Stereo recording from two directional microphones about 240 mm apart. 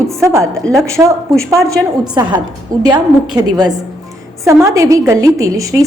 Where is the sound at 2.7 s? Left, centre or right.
Centre.